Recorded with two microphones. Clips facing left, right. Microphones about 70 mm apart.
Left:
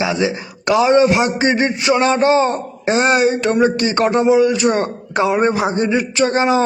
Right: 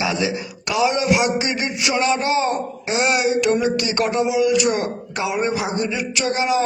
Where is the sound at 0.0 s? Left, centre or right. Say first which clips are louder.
Left 4 dB; left.